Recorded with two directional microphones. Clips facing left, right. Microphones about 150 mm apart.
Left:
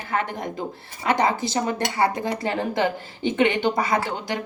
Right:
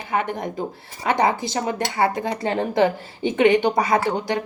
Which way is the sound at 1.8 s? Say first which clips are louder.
Right 1 dB; 25° right (ahead or behind).